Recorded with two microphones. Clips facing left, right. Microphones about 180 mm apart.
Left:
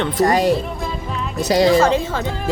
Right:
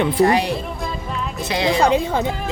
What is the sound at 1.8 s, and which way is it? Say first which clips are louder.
Speech: even; 15° right (ahead or behind).